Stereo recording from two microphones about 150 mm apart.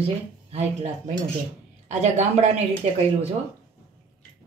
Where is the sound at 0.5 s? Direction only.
45° right (ahead or behind).